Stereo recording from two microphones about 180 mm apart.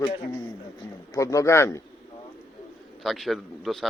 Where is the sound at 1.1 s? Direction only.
15° left (ahead or behind).